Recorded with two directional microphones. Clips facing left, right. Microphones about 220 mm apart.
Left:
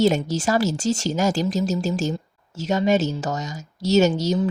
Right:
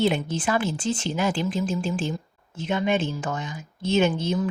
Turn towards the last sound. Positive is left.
turn(degrees=40)  # may be behind; listen again after turning